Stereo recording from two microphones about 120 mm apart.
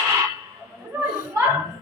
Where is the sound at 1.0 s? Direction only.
10° right (ahead or behind).